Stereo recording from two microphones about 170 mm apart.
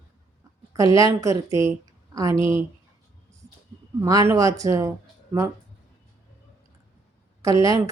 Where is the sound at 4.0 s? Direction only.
20° right (ahead or behind).